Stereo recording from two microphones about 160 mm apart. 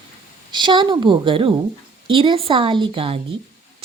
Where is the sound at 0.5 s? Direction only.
30° right (ahead or behind).